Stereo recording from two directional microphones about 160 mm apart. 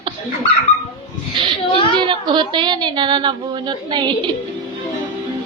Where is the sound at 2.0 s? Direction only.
30° right (ahead or behind).